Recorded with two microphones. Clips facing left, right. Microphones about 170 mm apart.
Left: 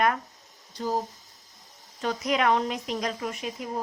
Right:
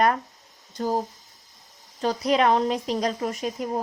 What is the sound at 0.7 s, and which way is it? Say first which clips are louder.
Speech: right 4 dB; 45° right (ahead or behind).